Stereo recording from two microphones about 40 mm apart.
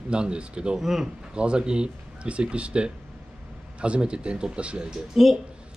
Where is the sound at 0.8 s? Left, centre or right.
Centre.